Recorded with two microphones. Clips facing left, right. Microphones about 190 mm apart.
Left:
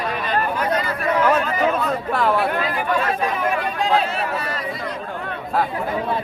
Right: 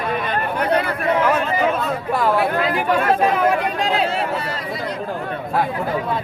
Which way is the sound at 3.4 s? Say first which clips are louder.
Right 3 dB; 90° right.